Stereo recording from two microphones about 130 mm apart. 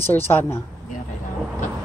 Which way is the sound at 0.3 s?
15° left (ahead or behind).